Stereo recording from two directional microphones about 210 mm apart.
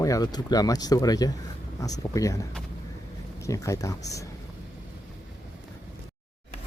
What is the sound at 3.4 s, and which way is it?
Speech, 15° left (ahead or behind).